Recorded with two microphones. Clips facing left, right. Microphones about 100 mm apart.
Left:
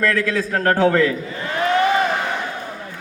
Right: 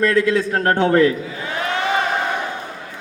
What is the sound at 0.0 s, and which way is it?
A man's voice, 20° right (ahead or behind).